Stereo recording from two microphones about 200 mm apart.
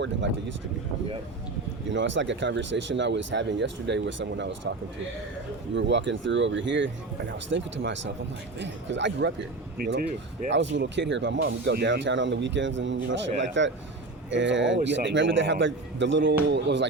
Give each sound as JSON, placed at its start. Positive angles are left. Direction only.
{"t": 0.0, "sound": "speech", "side_deg": -65}
{"t": 1.9, "sound": "speech", "side_deg": -65}
{"t": 5.7, "sound": "speech", "side_deg": -65}
{"t": 9.7, "sound": "speech", "side_deg": -50}